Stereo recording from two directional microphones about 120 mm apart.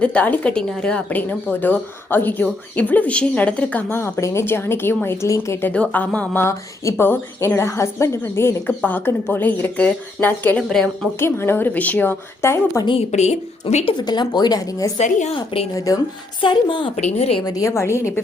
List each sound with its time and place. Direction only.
0.0 s a woman's voice: 10° left (ahead or behind)
3.9 s speech: 20° left (ahead or behind)
5.7 s a woman's voice: 10° left (ahead or behind)
10.6 s speech: 5° left (ahead or behind)
11.2 s speech: 20° left (ahead or behind)
13.0 s a woman's voice: 70° left (ahead or behind)
14.1 s speech: 35° left (ahead or behind)
14.9 s a woman's voice: 80° left
16.4 s a woman's voice: 40° left (ahead or behind)
17.0 s a woman's voice: 65° left (ahead or behind)
17.4 s speech: 25° left (ahead or behind)